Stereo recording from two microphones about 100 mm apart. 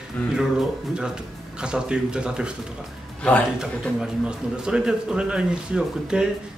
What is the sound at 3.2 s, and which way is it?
Speech, 10° left (ahead or behind).